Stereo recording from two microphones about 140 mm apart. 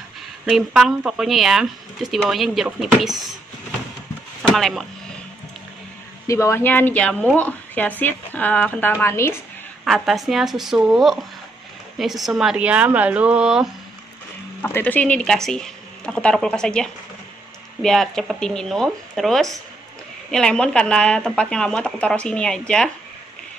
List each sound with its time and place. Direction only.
0.5 s speech: centre (ahead or behind)
4.4 s speech: 5° left (ahead or behind)
6.2 s speech: 20° left (ahead or behind)
9.8 s a woman's voice: centre (ahead or behind)
14.6 s speech: 15° left (ahead or behind)